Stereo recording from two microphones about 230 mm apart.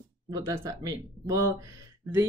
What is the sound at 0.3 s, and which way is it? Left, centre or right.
Speech, centre.